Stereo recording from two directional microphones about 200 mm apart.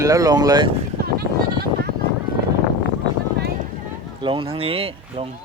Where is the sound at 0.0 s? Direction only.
15° right (ahead or behind).